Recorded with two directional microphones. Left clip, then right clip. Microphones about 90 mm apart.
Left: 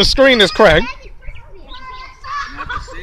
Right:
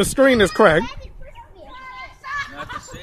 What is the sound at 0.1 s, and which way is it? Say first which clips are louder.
Speech: left 5 dB; 45° right (ahead or behind).